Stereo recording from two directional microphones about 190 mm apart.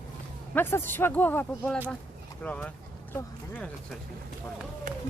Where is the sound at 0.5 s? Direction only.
10° left (ahead or behind).